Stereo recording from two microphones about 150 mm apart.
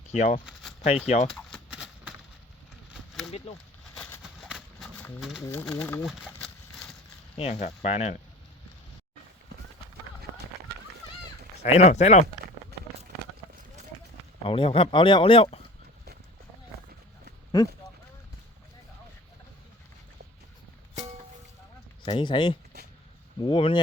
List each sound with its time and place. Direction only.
0.1 s speech: 55° left (ahead or behind)
1.5 s a sound: 5° right (ahead or behind)
4.2 s a sound: 5° right (ahead or behind)
5.4 s speech: 15° left (ahead or behind)
6.1 s speech: 5° right (ahead or behind)
7.3 s speech: 40° left (ahead or behind)
11.6 s speech: 50° left (ahead or behind)
14.4 s speech: 35° left (ahead or behind)
22.0 s speech: 35° left (ahead or behind)